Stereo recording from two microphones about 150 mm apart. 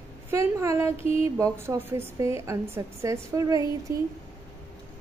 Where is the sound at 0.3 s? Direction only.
20° right (ahead or behind).